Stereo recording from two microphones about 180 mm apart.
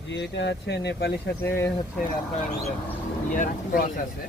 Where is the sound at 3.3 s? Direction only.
50° left (ahead or behind).